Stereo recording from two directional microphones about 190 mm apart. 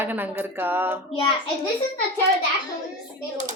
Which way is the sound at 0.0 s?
10° right (ahead or behind).